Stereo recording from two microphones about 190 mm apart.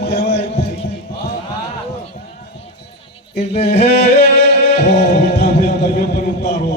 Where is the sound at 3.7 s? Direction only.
60° left (ahead or behind).